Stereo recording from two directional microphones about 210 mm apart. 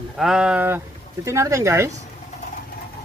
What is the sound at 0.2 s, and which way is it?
Speech, 5° right (ahead or behind).